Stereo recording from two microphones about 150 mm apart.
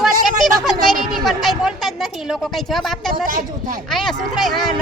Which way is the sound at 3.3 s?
70° right (ahead or behind).